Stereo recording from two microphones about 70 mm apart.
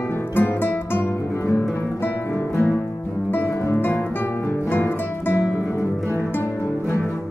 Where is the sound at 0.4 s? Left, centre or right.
Left.